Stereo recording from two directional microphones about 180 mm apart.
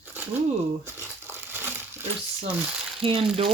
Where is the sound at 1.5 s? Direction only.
10° right (ahead or behind).